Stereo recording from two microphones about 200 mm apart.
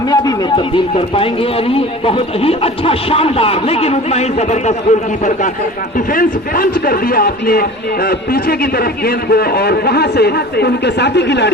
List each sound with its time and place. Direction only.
0.1 s speech: 20° left (ahead or behind); by 5.5 s 35° left (ahead or behind)
6.1 s a man's voice: 45° left (ahead or behind)
9.0 s a man's voice: 50° left (ahead or behind)